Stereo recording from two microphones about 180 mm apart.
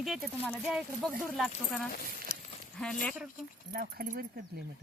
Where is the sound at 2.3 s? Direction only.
40° left (ahead or behind).